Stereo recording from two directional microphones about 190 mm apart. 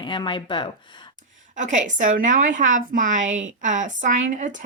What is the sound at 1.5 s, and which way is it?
A woman's voice, 40° right (ahead or behind).